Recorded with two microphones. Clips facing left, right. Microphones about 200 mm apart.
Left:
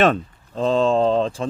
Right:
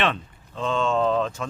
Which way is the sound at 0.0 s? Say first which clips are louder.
Left 8 dB; 40° left (ahead or behind).